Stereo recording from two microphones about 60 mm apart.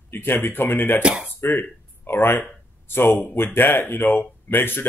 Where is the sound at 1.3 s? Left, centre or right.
Left.